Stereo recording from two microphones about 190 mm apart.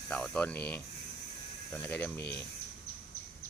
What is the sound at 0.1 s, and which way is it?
Speech, 5° left (ahead or behind).